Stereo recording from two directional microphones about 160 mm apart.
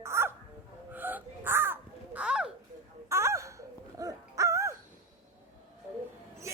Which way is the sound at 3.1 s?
20° right (ahead or behind).